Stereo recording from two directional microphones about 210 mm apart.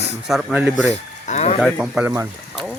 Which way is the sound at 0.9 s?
30° left (ahead or behind).